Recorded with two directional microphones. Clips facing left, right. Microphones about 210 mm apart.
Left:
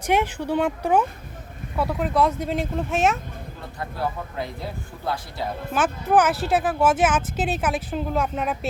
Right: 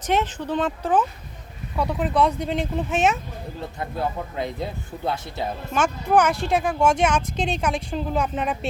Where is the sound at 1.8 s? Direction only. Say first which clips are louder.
Even; centre (ahead or behind).